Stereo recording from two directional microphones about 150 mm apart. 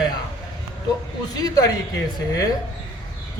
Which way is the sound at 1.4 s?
25° left (ahead or behind).